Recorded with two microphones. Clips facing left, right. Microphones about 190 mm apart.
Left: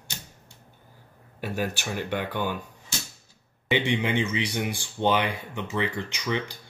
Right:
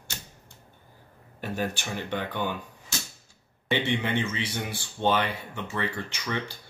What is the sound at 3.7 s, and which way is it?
A man's voice, 15° left (ahead or behind).